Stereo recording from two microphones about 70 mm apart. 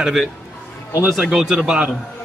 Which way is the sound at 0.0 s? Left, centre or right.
Centre.